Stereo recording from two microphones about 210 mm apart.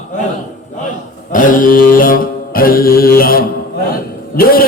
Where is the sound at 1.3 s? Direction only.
40° left (ahead or behind).